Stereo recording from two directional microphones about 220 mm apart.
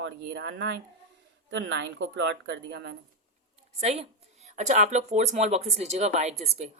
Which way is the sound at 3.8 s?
30° right (ahead or behind).